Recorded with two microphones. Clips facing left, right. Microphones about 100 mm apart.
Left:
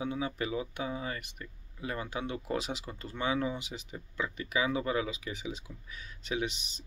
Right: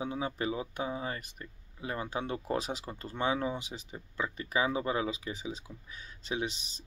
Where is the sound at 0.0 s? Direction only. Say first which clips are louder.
Even; 30° right (ahead or behind).